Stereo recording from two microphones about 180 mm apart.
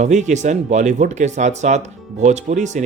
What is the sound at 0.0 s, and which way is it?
Speech, 40° right (ahead or behind).